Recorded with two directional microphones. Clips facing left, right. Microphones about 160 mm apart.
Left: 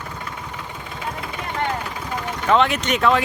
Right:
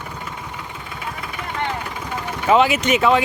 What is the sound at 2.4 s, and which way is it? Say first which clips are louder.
Speech: right 2 dB; 5° right (ahead or behind).